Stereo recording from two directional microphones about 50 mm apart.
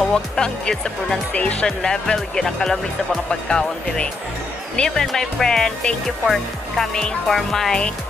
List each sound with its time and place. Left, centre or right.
0.1 s speech: centre
1.3 s speech: left
6.0 s speech: centre